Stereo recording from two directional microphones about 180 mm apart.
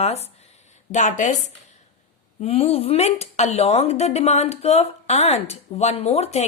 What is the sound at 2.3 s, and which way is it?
Speech, 35° left (ahead or behind).